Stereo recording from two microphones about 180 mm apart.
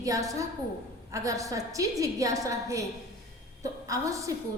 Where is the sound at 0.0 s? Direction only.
20° right (ahead or behind).